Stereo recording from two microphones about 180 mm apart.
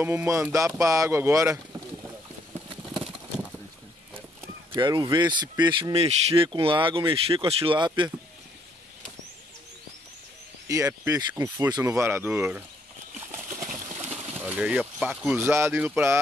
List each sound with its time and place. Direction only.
0.0 s speech: 15° right (ahead or behind)
4.7 s a man's voice: 25° right (ahead or behind)
10.7 s speech: 20° right (ahead or behind)
13.3 s horse: 15° right (ahead or behind)
13.7 s a sound: 40° right (ahead or behind)
14.4 s speech: 10° right (ahead or behind)